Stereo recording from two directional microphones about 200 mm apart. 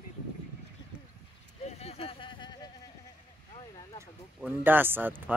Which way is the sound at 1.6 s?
30° left (ahead or behind).